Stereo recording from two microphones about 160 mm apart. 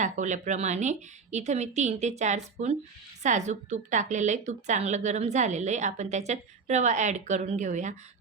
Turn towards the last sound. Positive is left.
turn(degrees=-50)  # may be behind; listen again after turning